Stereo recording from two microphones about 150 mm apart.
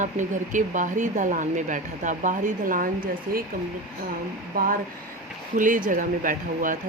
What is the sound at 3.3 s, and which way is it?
Speech, 80° right.